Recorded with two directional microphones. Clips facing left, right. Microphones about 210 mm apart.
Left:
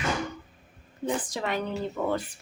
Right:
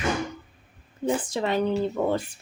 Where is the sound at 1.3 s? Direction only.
30° right (ahead or behind).